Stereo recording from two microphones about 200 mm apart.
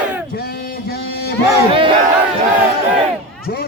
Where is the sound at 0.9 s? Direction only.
55° left (ahead or behind).